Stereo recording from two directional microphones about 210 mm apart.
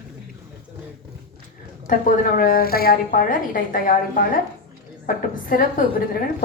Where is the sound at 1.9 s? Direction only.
40° left (ahead or behind).